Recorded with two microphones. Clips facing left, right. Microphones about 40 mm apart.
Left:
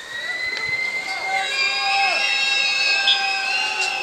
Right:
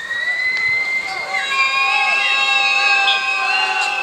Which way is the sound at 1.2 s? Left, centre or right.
Right.